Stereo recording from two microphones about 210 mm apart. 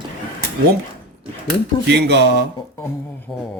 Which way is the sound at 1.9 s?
55° right (ahead or behind).